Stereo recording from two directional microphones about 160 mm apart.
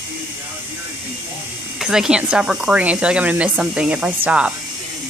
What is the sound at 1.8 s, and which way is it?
Speech, 5° right (ahead or behind).